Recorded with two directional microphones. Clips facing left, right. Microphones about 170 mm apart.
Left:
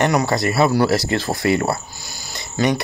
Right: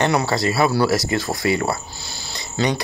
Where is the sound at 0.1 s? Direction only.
15° left (ahead or behind).